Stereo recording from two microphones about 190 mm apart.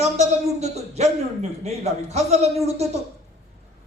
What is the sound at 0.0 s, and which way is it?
A man's voice, 35° right (ahead or behind).